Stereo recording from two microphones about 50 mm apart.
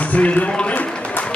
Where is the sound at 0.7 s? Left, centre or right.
Left.